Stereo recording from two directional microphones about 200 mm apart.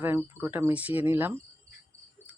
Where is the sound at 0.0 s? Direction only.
10° right (ahead or behind).